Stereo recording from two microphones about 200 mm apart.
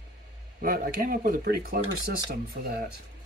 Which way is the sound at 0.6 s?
45° right (ahead or behind).